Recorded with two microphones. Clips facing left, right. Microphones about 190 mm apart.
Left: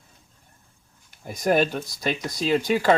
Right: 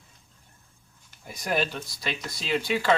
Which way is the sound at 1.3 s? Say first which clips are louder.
Left 7 dB; 45° left (ahead or behind).